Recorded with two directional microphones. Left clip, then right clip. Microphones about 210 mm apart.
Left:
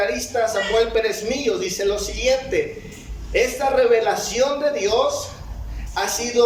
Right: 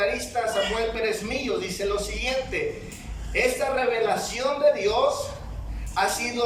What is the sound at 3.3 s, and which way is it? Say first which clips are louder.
Speech: left 4 dB; 35° left (ahead or behind).